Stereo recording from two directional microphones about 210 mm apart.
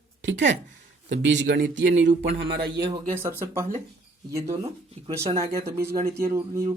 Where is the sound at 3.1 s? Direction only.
10° right (ahead or behind).